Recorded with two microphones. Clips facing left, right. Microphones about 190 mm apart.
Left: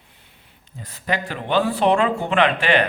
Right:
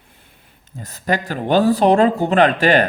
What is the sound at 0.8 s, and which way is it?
Speech, 45° right (ahead or behind).